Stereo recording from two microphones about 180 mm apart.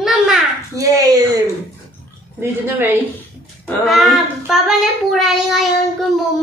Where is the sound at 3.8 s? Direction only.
Centre (ahead or behind).